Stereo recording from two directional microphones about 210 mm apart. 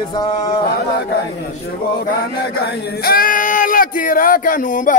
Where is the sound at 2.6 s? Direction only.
45° left (ahead or behind).